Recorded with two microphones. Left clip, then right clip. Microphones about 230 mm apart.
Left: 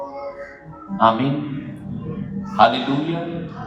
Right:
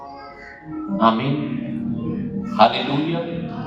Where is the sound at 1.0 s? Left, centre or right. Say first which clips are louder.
Left 2 dB; left.